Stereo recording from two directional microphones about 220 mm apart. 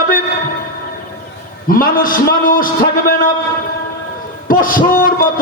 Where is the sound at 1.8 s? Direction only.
40° left (ahead or behind).